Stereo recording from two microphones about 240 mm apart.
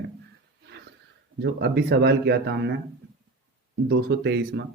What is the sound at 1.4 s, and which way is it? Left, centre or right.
Speech, right.